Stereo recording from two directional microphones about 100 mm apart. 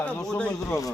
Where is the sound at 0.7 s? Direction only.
35° left (ahead or behind).